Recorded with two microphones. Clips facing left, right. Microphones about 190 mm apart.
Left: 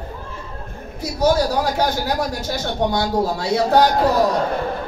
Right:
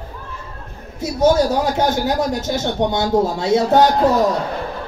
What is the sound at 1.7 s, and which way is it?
A man's voice, 20° right (ahead or behind).